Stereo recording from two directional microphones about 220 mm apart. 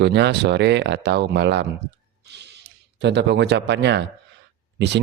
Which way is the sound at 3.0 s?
50° right (ahead or behind).